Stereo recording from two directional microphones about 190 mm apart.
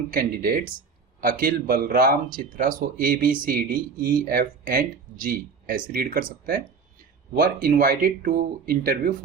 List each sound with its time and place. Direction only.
0.1 s speech: 50° right (ahead or behind)